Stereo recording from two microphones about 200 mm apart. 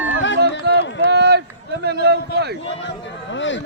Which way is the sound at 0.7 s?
55° right (ahead or behind).